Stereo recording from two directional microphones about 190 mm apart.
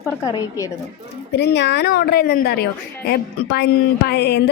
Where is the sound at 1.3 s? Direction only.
65° left (ahead or behind).